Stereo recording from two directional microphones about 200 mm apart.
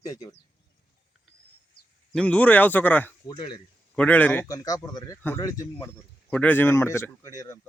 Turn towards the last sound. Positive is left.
turn(degrees=15)  # may be behind; listen again after turning